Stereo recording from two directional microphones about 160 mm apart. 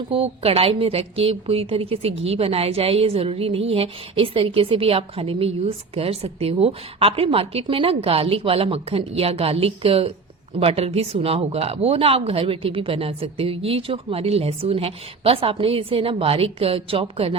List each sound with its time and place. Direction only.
0.1 s a woman's voice: 35° right (ahead or behind)